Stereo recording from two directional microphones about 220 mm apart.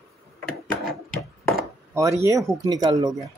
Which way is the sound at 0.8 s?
Centre (ahead or behind).